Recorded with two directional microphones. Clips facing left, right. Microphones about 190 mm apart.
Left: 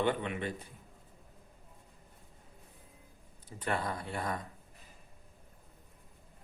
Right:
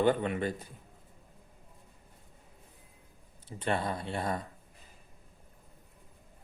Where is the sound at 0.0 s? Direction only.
40° right (ahead or behind).